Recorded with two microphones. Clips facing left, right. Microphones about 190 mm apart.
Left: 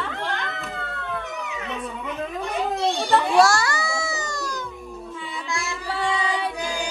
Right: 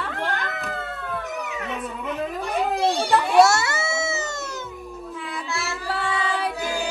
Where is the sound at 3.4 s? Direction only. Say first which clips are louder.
Right 1 dB; 20° right (ahead or behind).